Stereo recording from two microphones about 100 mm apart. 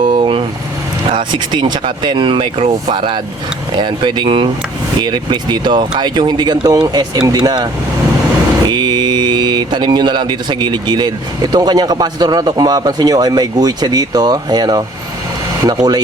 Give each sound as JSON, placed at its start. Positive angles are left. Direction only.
{"t": 0.1, "sound": "vehicle", "side_deg": -55}
{"t": 1.1, "sound": "speech", "side_deg": -50}
{"t": 3.8, "sound": "speech", "side_deg": -50}